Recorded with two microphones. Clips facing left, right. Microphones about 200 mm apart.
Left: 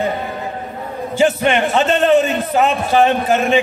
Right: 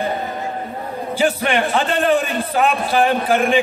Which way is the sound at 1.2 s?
25° left (ahead or behind).